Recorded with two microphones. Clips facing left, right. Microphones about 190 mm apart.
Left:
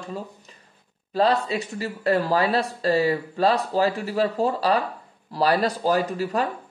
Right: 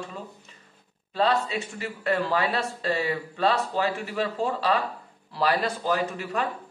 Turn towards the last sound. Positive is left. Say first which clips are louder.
# left 4 dB
turn(degrees=35)  # may be behind; listen again after turning